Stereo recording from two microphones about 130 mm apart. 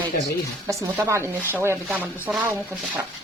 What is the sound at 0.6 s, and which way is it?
Speech, 20° right (ahead or behind).